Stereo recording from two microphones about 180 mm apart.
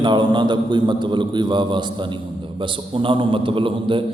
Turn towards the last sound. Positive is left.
turn(degrees=-30)  # may be behind; listen again after turning